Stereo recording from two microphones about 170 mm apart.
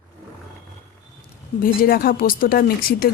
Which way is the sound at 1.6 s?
60° left (ahead or behind).